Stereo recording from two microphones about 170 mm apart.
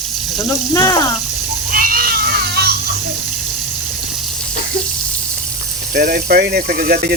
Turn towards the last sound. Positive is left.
turn(degrees=-60)  # may be behind; listen again after turning